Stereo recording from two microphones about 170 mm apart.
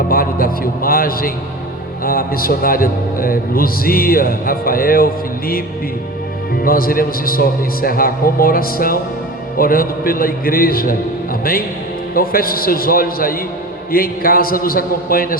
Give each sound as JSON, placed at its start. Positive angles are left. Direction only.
{"t": 0.1, "sound": "a man's voice", "side_deg": 60}
{"t": 6.6, "sound": "a man's voice", "side_deg": 60}
{"t": 12.1, "sound": "a man's voice", "side_deg": 60}